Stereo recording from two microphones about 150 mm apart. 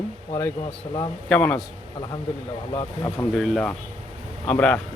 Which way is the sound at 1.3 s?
10° left (ahead or behind).